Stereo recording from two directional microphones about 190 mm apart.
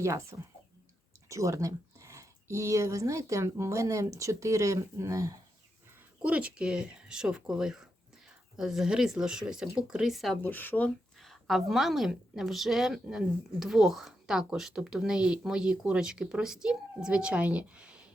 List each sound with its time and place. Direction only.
0.0 s speech: 15° right (ahead or behind)
10.4 s speech: 10° left (ahead or behind); by 18.1 s 5° right (ahead or behind)